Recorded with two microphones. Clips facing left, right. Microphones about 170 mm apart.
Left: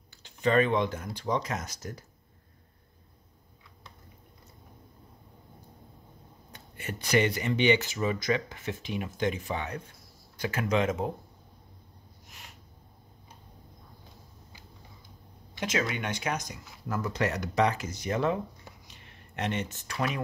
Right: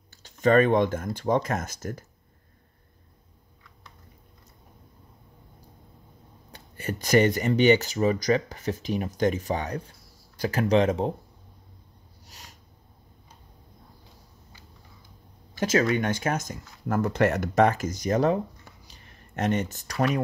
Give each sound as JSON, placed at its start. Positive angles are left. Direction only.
{"t": 0.2, "sound": "speech", "side_deg": -45}
{"t": 6.5, "sound": "speech", "side_deg": -40}
{"t": 12.3, "sound": "snort", "side_deg": -40}
{"t": 15.5, "sound": "speech", "side_deg": -40}
{"t": 18.9, "sound": "a sound", "side_deg": -40}